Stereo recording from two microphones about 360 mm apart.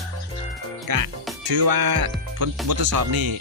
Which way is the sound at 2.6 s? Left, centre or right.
Right.